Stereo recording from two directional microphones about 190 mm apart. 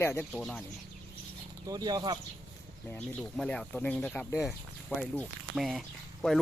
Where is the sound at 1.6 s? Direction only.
20° right (ahead or behind).